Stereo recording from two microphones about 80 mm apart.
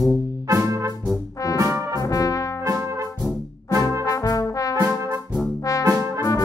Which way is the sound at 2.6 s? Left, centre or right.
Right.